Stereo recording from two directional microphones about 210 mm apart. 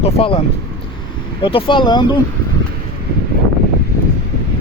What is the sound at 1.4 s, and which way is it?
Speech, 25° left (ahead or behind).